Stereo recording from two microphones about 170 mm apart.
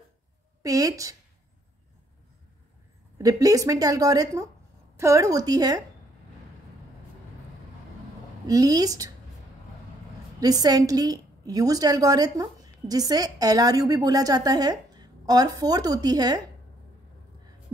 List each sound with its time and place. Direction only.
0.6 s a woman's voice: 20° right (ahead or behind)
3.2 s a woman's voice: 20° right (ahead or behind)
8.5 s a woman's voice: 20° right (ahead or behind)
10.6 s a woman's voice: 20° right (ahead or behind)